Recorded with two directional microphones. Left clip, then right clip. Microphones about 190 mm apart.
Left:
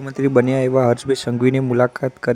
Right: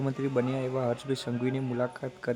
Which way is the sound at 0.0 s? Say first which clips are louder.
Left 13 dB; 35° left (ahead or behind).